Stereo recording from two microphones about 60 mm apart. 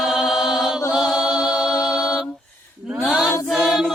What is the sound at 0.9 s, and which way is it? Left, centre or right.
Music, centre.